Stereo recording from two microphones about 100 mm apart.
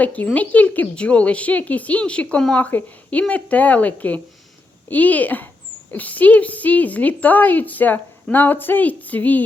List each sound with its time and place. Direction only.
0.0 s a woman's voice: 15° left (ahead or behind)